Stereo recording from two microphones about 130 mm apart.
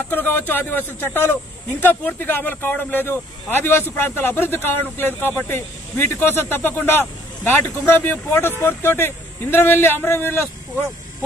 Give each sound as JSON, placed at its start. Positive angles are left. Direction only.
{"t": 0.1, "sound": "speech", "side_deg": 15}